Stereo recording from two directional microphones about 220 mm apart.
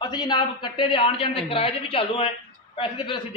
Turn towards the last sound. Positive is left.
turn(degrees=25)  # may be behind; listen again after turning